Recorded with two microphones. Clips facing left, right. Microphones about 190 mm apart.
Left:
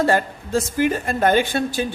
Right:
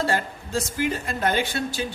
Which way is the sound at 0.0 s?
55° left (ahead or behind).